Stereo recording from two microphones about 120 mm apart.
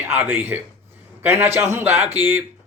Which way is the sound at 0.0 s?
15° right (ahead or behind).